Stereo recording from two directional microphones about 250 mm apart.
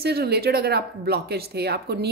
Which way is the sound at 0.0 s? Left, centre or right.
Right.